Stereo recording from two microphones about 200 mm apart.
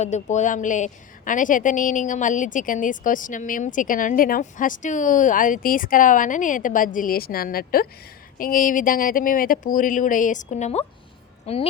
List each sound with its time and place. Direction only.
0.0 s a woman's voice: 35° left (ahead or behind)